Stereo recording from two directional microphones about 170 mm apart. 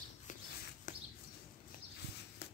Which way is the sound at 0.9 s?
45° left (ahead or behind).